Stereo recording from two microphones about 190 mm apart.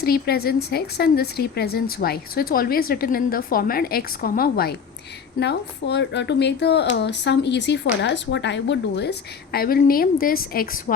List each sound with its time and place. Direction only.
0.0 s a woman's voice: 55° left (ahead or behind)